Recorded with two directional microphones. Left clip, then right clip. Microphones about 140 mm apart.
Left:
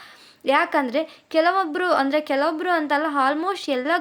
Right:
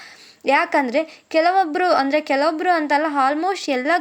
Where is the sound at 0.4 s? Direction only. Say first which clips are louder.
Right 2 dB; 20° right (ahead or behind).